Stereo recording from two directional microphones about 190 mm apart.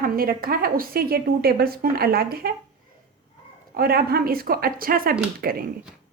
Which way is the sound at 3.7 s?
55° right (ahead or behind).